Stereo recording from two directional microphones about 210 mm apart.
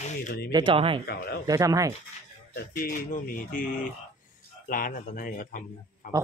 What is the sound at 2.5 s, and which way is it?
Speech, 45° left (ahead or behind).